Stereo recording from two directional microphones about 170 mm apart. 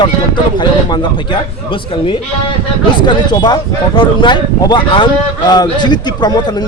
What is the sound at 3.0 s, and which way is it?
A man's voice, 25° left (ahead or behind).